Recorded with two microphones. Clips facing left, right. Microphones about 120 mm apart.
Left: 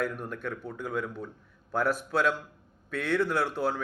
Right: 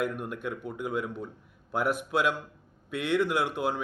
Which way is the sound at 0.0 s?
15° right (ahead or behind).